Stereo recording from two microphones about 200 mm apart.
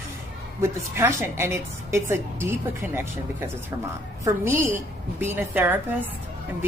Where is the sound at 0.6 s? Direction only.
10° right (ahead or behind).